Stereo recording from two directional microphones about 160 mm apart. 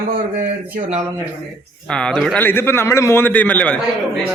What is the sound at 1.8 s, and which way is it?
Speech, 5° left (ahead or behind).